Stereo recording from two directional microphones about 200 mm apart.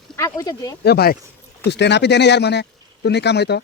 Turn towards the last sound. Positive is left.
turn(degrees=55)  # may be behind; listen again after turning